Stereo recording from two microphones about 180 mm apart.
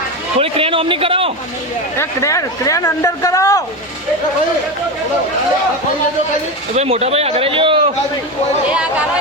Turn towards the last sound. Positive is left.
turn(degrees=-30)  # may be behind; listen again after turning